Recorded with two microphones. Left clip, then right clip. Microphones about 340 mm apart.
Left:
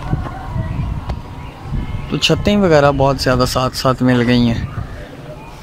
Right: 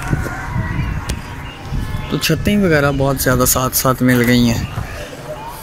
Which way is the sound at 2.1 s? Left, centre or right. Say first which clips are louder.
Left 3 dB; centre.